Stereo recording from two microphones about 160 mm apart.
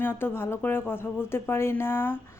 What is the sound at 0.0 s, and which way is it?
Speech, 15° left (ahead or behind).